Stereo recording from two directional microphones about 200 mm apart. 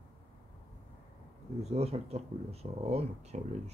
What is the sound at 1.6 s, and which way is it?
Speech, 30° right (ahead or behind).